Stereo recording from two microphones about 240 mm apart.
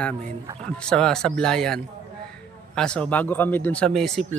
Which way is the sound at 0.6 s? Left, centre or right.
Centre.